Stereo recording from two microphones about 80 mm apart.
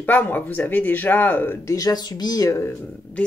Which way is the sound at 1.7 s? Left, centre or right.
Left.